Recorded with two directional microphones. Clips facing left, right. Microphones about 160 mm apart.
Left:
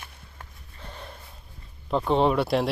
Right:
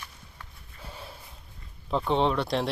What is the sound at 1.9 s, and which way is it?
Speech, 5° left (ahead or behind).